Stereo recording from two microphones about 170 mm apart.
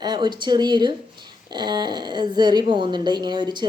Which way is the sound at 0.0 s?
25° right (ahead or behind).